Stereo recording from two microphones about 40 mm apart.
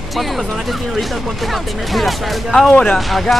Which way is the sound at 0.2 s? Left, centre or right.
Centre.